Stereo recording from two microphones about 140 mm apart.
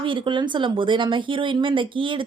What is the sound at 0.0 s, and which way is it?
Speech, 35° right (ahead or behind).